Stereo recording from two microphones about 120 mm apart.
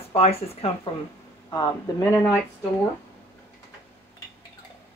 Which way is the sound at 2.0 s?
15° left (ahead or behind).